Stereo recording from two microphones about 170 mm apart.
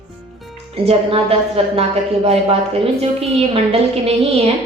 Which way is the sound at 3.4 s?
35° right (ahead or behind).